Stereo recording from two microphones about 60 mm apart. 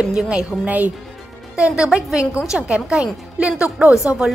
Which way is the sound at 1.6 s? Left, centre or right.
Centre.